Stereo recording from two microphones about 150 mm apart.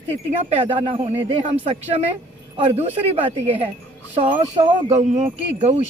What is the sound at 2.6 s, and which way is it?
A woman's voice, 40° right (ahead or behind).